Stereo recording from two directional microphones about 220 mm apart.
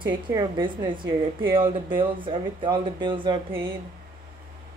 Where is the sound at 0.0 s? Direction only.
20° right (ahead or behind).